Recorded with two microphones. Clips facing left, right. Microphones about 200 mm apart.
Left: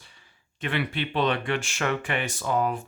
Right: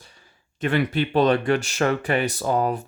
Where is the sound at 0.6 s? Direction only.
40° right (ahead or behind).